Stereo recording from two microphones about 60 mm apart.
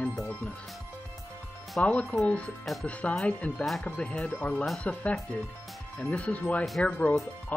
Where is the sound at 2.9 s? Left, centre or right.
Left.